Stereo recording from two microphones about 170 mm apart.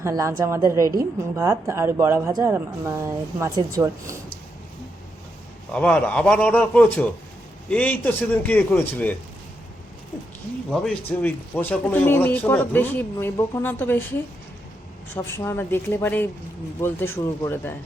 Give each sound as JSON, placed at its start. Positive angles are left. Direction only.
{"t": 0.0, "sound": "a woman's voice", "side_deg": -15}
{"t": 5.7, "sound": "a man's voice", "side_deg": 10}
{"t": 10.7, "sound": "a man's voice", "side_deg": 5}
{"t": 15.1, "sound": "a man's voice", "side_deg": 15}